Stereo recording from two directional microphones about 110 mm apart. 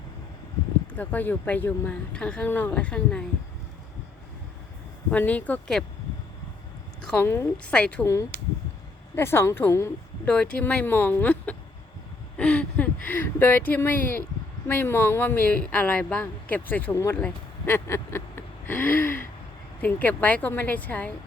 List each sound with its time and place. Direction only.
0.9 s speech: 15° left (ahead or behind)
5.1 s speech: 15° left (ahead or behind)
7.2 s a woman's voice: 25° left (ahead or behind)
7.6 s speech: 10° left (ahead or behind)
8.0 s a woman's voice: 25° left (ahead or behind)
10.2 s speech: 10° left (ahead or behind)
12.4 s a sound: 10° left (ahead or behind)
14.7 s speech: 20° left (ahead or behind)
17.7 s a sound: 25° left (ahead or behind)
19.8 s speech: 15° left (ahead or behind)